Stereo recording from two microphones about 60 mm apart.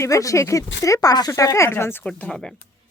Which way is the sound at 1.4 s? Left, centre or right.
Left.